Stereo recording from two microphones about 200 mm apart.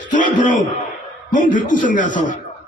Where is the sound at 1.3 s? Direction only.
40° left (ahead or behind).